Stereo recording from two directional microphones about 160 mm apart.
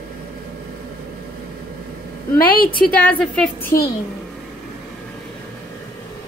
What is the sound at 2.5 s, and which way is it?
Speech, 65° left (ahead or behind).